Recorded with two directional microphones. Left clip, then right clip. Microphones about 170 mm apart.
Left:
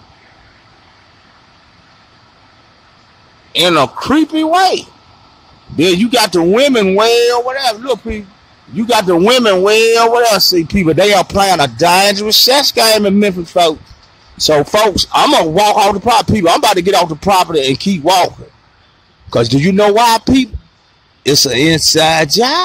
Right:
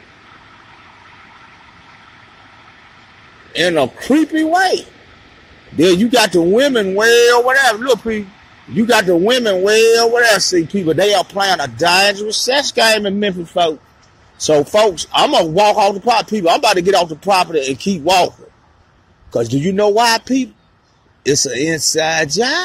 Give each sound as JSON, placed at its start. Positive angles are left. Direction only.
{"t": 3.5, "sound": "speech", "side_deg": 10}
{"t": 5.8, "sound": "speech", "side_deg": 15}
{"t": 7.0, "sound": "speech", "side_deg": 5}
{"t": 7.2, "sound": "speech", "side_deg": -5}
{"t": 10.7, "sound": "music", "side_deg": 30}
{"t": 14.3, "sound": "a man's voice", "side_deg": 30}
{"t": 16.6, "sound": "music", "side_deg": 30}
{"t": 19.3, "sound": "a man's voice", "side_deg": 35}